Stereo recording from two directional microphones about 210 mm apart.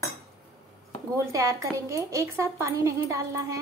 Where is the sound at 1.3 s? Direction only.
15° right (ahead or behind).